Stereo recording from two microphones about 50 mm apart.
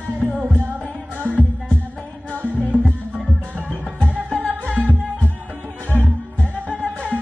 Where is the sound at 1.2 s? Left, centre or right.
Right.